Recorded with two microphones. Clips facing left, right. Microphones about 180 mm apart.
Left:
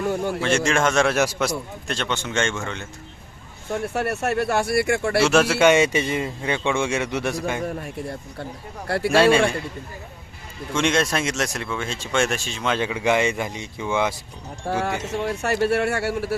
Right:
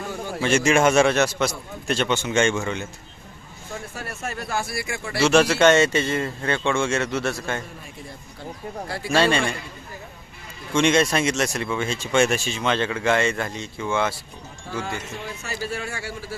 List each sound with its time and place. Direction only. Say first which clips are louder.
0.3 s a man's voice: right 7 dB; 5° right (ahead or behind)
1.1 s speech: even; 10° left (ahead or behind); by 2.8 s 10° right (ahead or behind)
3.7 s speech: left 10 dB; 65° left (ahead or behind)
5.2 s a man's voice: right 2 dB; centre (ahead or behind)
7.6 s speech: left 11 dB; 65° left (ahead or behind)
9.1 s speech: left 4 dB; 5° left (ahead or behind)
10.8 s speech: right 2 dB; centre (ahead or behind); by 14.2 s 15° left (ahead or behind)
14.7 s speech: left 6 dB; 70° left (ahead or behind)